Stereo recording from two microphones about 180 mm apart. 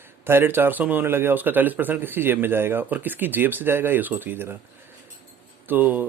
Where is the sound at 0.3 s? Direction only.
10° right (ahead or behind).